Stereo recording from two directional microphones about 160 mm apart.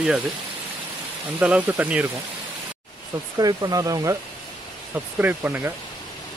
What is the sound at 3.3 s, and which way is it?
Speech, 20° right (ahead or behind).